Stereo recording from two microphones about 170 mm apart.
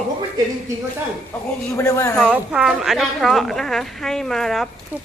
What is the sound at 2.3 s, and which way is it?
A woman's voice, 5° right (ahead or behind).